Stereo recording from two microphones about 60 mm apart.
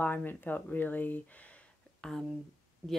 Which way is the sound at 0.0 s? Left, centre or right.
Left.